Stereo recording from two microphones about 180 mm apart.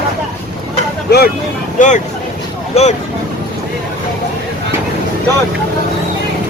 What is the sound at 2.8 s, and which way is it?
Speech, 35° left (ahead or behind).